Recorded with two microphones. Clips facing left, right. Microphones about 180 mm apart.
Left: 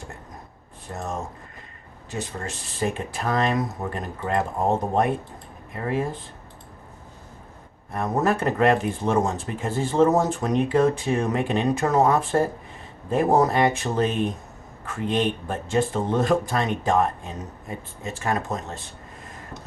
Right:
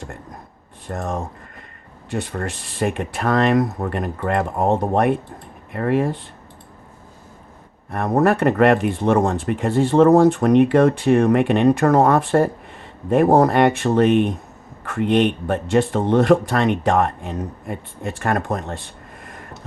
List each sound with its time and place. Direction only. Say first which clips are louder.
0.9 s speech: right 5 dB; 60° right (ahead or behind)
7.9 s speech: right 6 dB; 60° right (ahead or behind)
19.2 s a sound: right 4 dB; 65° right (ahead or behind)